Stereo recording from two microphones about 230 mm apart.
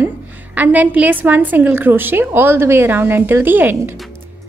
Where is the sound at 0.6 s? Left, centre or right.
Centre.